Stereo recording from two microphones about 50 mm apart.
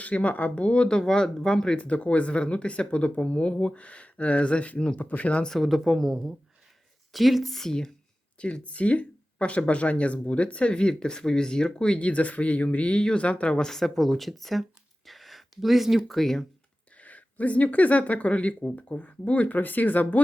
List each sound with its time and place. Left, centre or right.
0.0 s speech: left; by 1.7 s centre
1.7 s speech: left
5.5 s speech: centre
8.4 s speech: left
13.7 s speech: centre
17.0 s speech: left